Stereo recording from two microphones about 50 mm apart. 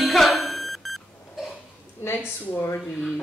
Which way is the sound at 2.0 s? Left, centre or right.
Left.